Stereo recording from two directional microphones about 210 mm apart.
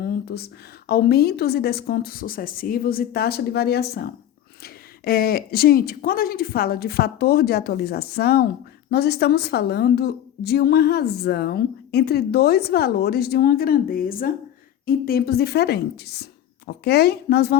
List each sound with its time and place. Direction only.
0.0 s a woman's voice: 50° left (ahead or behind)